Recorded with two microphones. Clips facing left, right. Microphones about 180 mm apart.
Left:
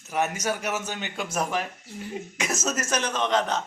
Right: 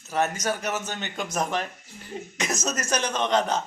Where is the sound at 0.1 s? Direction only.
10° left (ahead or behind).